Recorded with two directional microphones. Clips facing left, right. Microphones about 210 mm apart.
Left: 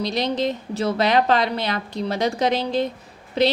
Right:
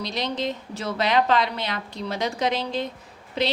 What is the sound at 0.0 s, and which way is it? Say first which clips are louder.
A woman's voice: left 5 dB; 35° left (ahead or behind).